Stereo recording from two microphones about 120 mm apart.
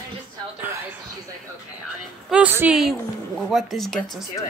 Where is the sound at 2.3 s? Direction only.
15° right (ahead or behind).